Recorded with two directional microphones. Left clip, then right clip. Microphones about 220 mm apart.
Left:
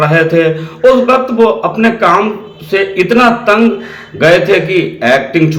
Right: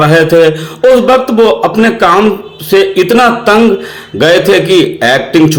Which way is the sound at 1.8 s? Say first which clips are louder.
Right 1 dB; 50° right (ahead or behind).